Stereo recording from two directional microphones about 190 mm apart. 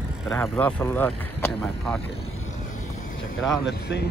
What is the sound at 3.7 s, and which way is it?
Speech, 60° left (ahead or behind).